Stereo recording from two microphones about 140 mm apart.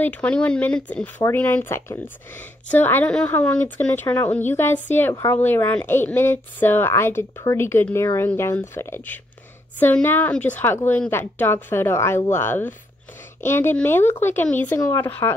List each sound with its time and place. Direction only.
0.0 s speech: 10° left (ahead or behind)